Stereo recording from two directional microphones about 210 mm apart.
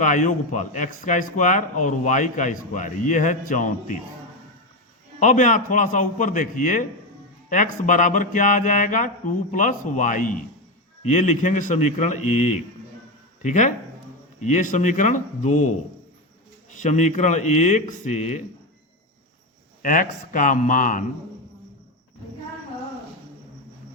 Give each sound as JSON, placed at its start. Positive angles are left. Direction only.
{"t": 0.0, "sound": "speech", "side_deg": 35}
{"t": 5.2, "sound": "speech", "side_deg": 35}
{"t": 16.8, "sound": "speech", "side_deg": 35}
{"t": 19.8, "sound": "speech", "side_deg": 40}